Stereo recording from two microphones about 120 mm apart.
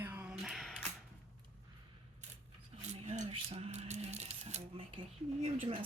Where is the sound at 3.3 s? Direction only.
55° right (ahead or behind).